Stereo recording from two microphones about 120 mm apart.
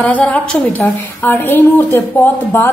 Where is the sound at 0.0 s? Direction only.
10° left (ahead or behind).